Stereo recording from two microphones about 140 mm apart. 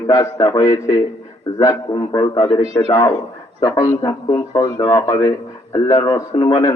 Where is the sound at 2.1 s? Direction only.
30° left (ahead or behind).